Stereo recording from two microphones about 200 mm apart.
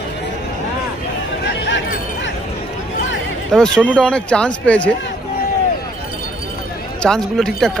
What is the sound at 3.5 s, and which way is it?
Speech, 5° left (ahead or behind).